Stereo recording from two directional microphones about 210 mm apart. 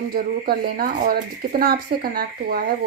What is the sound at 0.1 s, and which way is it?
Speech, 45° right (ahead or behind).